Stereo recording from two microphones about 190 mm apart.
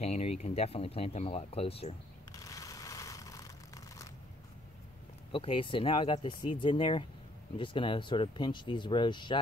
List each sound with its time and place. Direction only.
0.0 s speech: 35° left (ahead or behind)
2.3 s a sound: 15° left (ahead or behind)
5.3 s speech: 25° left (ahead or behind)